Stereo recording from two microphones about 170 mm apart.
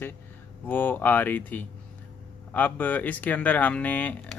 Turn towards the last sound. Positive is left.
turn(degrees=10)  # may be behind; listen again after turning